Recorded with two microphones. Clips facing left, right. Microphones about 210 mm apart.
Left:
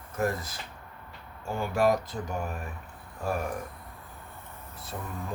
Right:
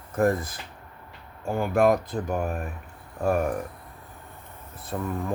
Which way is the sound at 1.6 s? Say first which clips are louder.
Right 4 dB; 55° right (ahead or behind).